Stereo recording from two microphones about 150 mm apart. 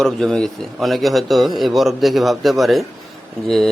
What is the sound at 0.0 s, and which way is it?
A man's voice, 5° left (ahead or behind).